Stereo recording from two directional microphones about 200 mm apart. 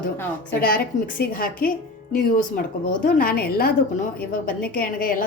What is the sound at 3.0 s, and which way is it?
A woman's voice, 45° left (ahead or behind).